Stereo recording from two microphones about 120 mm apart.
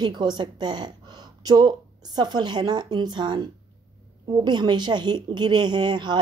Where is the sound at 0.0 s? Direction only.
40° right (ahead or behind).